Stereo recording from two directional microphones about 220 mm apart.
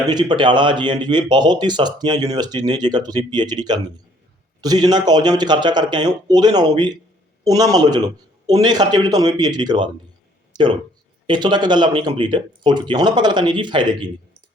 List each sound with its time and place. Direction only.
0.1 s a man's voice: 20° right (ahead or behind)